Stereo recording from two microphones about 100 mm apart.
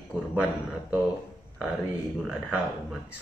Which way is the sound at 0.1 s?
20° right (ahead or behind).